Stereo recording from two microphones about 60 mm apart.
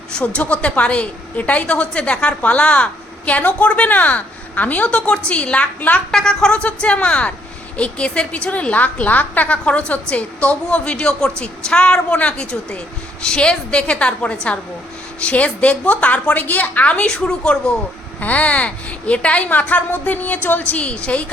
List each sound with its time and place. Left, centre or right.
0.1 s a woman's voice: left
6.1 s a woman's voice: centre